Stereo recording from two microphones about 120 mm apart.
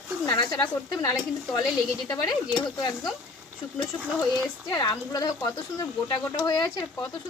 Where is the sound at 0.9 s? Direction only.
30° left (ahead or behind).